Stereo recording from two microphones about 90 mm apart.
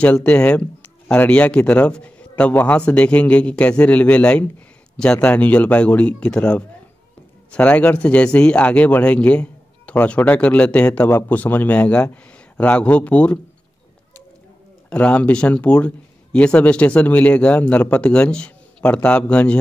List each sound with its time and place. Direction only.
0.0 s a man's voice: 15° left (ahead or behind)
14.9 s speech: 15° left (ahead or behind)